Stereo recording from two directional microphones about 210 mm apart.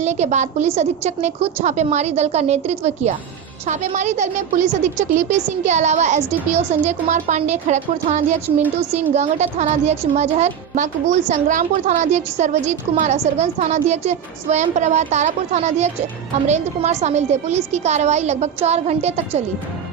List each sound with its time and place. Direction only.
0.0 s a woman's voice: 30° right (ahead or behind)